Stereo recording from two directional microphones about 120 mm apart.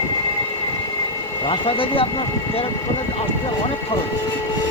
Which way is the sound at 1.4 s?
45° left (ahead or behind).